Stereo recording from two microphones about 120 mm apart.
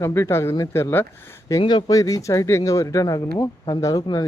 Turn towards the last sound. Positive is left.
turn(degrees=30)  # may be behind; listen again after turning